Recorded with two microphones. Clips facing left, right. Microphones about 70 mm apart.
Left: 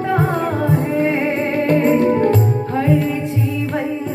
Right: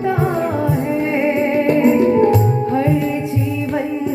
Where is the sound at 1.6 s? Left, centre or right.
Centre.